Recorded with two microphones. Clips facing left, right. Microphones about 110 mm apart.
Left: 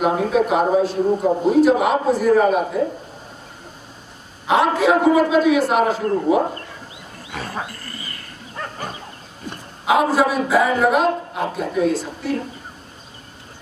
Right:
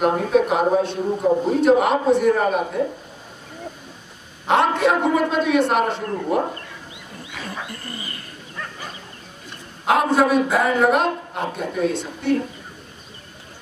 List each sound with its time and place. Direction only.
0.0 s a man's voice: centre (ahead or behind)
4.5 s a man's voice: centre (ahead or behind)
7.2 s wild animals: 40° left (ahead or behind)
8.5 s dog: 40° left (ahead or behind)
9.8 s a man's voice: centre (ahead or behind)